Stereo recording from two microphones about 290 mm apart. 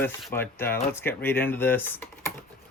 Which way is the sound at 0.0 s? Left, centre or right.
Centre.